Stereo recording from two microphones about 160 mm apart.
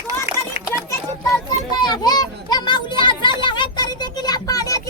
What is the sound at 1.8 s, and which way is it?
Children playing, 25° left (ahead or behind).